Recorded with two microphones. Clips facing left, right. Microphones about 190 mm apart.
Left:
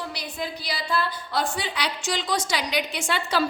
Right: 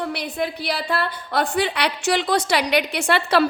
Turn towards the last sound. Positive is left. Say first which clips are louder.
# right 6 dB
turn(degrees=-65)  # may be behind; listen again after turning